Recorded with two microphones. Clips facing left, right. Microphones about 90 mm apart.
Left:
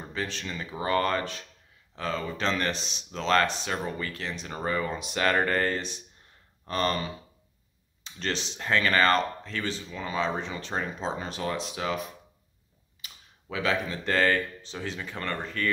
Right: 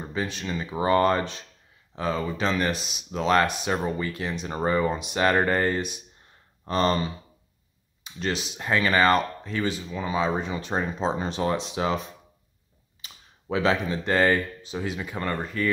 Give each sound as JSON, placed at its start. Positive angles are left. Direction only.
{"t": 0.1, "sound": "speech", "side_deg": -15}
{"t": 4.5, "sound": "speech", "side_deg": -25}
{"t": 8.0, "sound": "speech", "side_deg": -10}
{"t": 13.0, "sound": "speech", "side_deg": -30}